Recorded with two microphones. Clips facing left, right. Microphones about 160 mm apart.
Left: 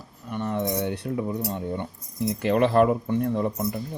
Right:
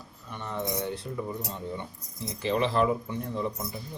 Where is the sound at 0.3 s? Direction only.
55° left (ahead or behind).